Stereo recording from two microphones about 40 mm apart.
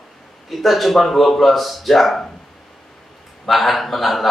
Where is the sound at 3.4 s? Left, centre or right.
Centre.